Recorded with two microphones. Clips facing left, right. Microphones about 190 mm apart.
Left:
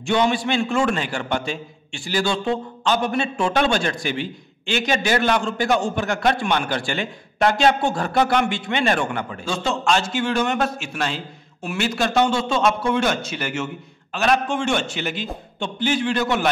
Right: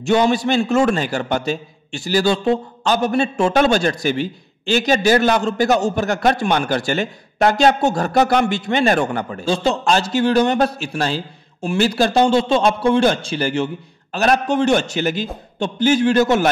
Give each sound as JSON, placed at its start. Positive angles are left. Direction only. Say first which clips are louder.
{"t": 0.0, "sound": "a man's voice", "louder": "right 4 dB", "side_deg": -40}